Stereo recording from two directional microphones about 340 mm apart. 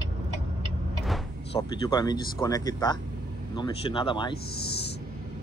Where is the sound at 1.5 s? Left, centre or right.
Centre.